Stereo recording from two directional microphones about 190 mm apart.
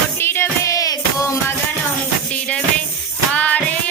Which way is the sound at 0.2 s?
10° left (ahead or behind).